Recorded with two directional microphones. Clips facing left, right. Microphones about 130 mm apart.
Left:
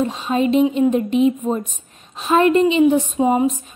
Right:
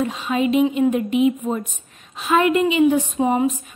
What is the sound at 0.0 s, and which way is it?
A woman's voice, 30° left (ahead or behind).